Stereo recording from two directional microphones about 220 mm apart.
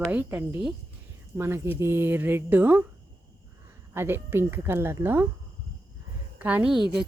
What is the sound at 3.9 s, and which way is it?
Speech, 10° right (ahead or behind).